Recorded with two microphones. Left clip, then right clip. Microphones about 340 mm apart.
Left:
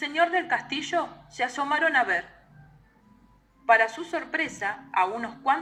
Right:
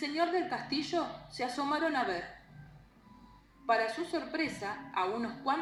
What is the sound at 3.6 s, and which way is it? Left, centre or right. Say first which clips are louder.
A woman's voice: left 9 dB; left.